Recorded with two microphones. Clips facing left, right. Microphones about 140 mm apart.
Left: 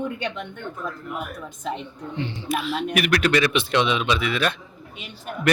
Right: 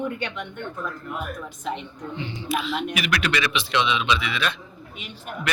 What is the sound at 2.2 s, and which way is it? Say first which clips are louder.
Speech: right 1 dB; 55° left (ahead or behind).